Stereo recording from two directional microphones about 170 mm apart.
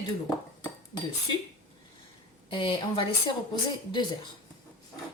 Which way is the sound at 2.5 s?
30° left (ahead or behind).